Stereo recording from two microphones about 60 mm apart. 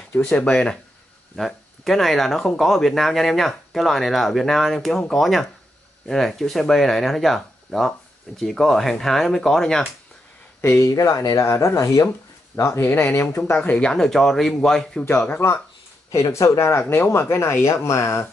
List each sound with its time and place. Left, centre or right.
0.2 s speech: centre
1.3 s speech: centre
10.8 s speech: left
11.7 s speech: left
12.8 s speech: left
13.1 s speech: left
13.7 s speech: centre
15.4 s speech: left
16.1 s speech: left
17.6 s speech: left